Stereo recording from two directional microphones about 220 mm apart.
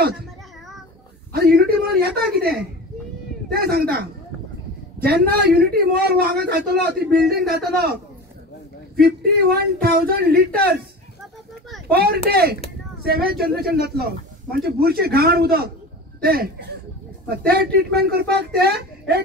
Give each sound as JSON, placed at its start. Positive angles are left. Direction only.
{"t": 1.3, "sound": "a sound", "side_deg": -45}
{"t": 3.5, "sound": "a man's voice", "side_deg": -45}
{"t": 5.0, "sound": "a man's voice", "side_deg": -45}
{"t": 11.9, "sound": "a man's voice", "side_deg": -45}